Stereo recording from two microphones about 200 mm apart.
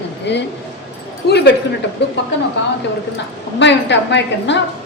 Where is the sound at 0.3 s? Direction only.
60° left (ahead or behind).